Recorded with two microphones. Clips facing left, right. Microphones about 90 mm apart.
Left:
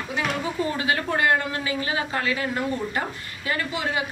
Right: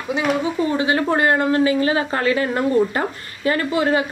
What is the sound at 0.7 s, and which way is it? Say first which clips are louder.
A man's voice: right 6 dB; 25° right (ahead or behind).